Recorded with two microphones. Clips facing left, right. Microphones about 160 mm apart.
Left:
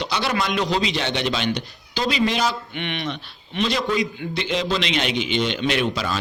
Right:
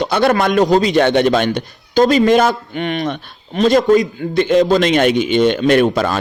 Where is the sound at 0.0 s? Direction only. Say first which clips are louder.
Right 10 dB; 55° right (ahead or behind).